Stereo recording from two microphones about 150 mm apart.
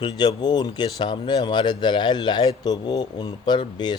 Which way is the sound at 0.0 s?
25° left (ahead or behind).